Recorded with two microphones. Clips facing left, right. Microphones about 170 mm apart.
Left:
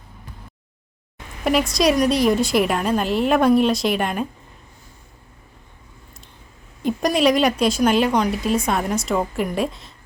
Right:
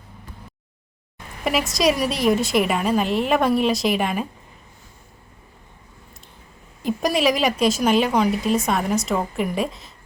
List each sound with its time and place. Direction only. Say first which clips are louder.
1.5 s a woman's voice: left 2 dB; centre (ahead or behind)
6.8 s a woman's voice: left 2 dB; centre (ahead or behind)